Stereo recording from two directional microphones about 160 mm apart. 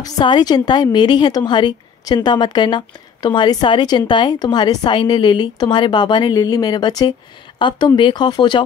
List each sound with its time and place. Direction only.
0.0 s a woman's voice: 25° left (ahead or behind)